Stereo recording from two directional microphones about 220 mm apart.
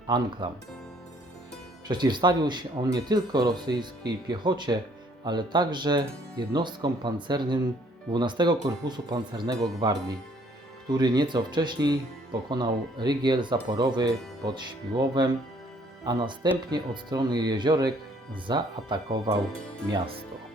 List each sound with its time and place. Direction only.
0.4 s speech: 20° right (ahead or behind)
1.9 s speech: 20° right (ahead or behind)